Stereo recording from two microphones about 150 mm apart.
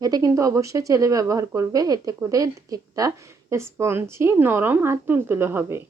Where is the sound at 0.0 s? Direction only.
25° right (ahead or behind).